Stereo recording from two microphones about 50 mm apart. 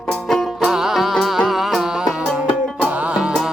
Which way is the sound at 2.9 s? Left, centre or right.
Right.